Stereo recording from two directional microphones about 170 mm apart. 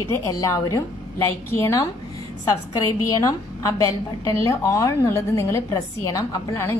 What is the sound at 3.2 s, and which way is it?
A woman's voice, 20° left (ahead or behind).